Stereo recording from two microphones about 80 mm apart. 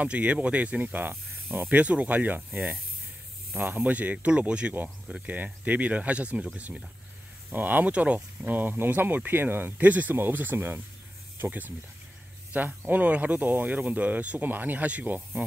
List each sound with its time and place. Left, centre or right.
0.0 s speech: centre